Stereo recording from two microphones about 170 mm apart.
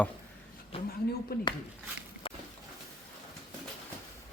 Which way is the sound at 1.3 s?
65° left (ahead or behind).